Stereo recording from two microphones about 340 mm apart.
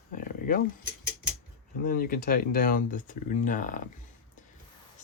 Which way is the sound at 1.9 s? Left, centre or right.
Left.